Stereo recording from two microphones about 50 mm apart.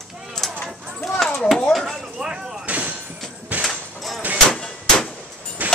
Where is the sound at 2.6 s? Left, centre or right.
Right.